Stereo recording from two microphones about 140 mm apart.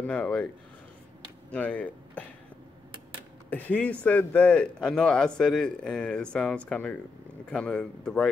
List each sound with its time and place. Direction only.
0.0 s speech: 10° left (ahead or behind)
1.5 s speech: 10° left (ahead or behind)
3.4 s speech: 10° left (ahead or behind)